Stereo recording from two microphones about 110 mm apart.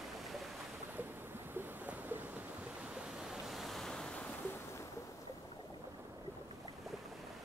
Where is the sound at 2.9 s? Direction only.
5° right (ahead or behind).